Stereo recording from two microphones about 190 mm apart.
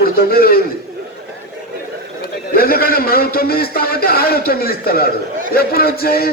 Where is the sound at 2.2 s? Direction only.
50° left (ahead or behind).